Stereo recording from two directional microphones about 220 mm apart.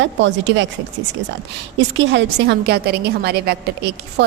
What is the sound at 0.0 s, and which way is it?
Speech, 55° right (ahead or behind).